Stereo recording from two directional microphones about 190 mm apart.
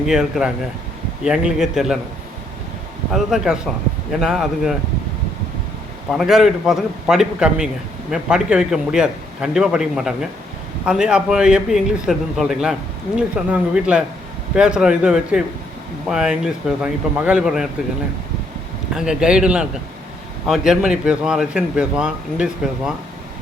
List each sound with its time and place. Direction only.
0.0 s a man's voice: centre (ahead or behind)
3.1 s a man's voice: centre (ahead or behind)
6.1 s a man's voice: centre (ahead or behind)
18.9 s a man's voice: 5° right (ahead or behind)